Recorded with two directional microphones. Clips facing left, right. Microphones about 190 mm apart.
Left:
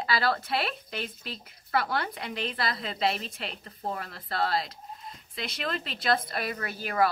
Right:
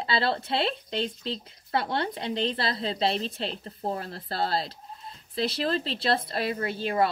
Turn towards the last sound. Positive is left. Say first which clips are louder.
# right 2 dB
turn(degrees=-25)  # may be behind; listen again after turning